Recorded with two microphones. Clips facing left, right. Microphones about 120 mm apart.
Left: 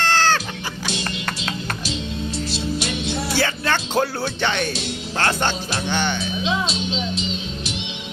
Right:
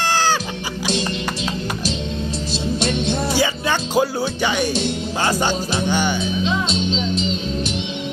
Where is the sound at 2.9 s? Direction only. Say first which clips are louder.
Right 5 dB; 10° left (ahead or behind).